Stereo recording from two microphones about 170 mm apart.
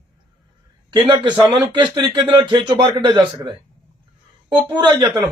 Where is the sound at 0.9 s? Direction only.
25° right (ahead or behind).